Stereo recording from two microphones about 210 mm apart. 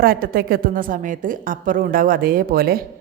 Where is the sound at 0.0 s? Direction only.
45° right (ahead or behind).